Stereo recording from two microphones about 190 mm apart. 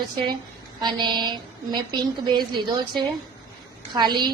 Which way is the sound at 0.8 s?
25° right (ahead or behind).